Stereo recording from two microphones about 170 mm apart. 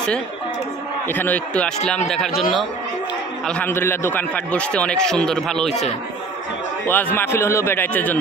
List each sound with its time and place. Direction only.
1.0 s a man's voice: 10° left (ahead or behind)
3.4 s a man's voice: 10° left (ahead or behind)
5.7 s a man's voice: 40° left (ahead or behind)
6.9 s a man's voice: 10° left (ahead or behind)